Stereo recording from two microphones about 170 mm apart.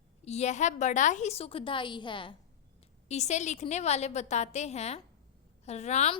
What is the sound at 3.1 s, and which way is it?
A woman's voice, 40° left (ahead or behind).